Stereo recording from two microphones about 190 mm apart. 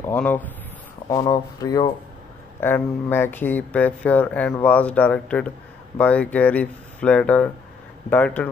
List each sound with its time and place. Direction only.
0.0 s speech: 10° left (ahead or behind)
1.0 s speech: 20° left (ahead or behind)